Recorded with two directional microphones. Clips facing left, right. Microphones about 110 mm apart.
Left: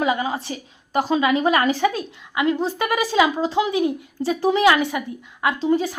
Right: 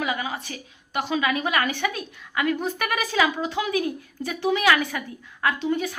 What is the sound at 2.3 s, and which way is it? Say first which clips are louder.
A woman's voice: left 4 dB; 20° left (ahead or behind).